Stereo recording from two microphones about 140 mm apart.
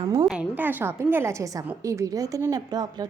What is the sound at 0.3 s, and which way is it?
A woman's voice, 10° right (ahead or behind).